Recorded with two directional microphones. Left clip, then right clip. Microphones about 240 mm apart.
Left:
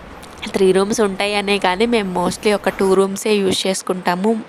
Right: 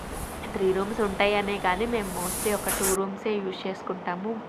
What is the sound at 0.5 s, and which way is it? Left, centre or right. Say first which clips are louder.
Speech: left 11 dB; left.